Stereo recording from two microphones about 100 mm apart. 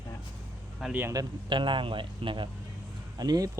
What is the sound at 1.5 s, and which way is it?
Speech, 55° right (ahead or behind).